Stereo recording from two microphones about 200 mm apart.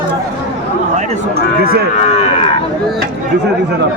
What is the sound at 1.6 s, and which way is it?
Speech, 50° right (ahead or behind).